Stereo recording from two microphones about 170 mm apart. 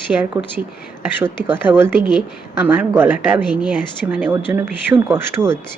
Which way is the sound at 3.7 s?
10° right (ahead or behind).